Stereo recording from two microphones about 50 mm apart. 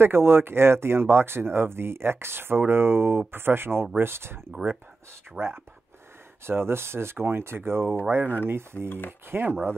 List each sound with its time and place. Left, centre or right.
0.0 s speech: right
5.4 s speech: right
6.4 s speech: right
8.8 s speech: left
9.3 s speech: right